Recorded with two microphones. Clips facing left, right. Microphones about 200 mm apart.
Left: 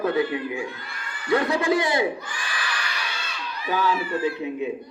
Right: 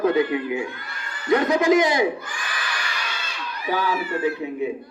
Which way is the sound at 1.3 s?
20° right (ahead or behind).